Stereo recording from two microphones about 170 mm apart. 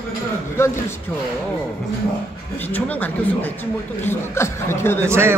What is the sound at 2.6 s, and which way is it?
Speech, 10° left (ahead or behind).